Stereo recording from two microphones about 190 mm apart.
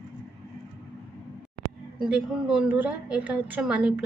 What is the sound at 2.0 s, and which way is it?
A woman's voice, 5° right (ahead or behind).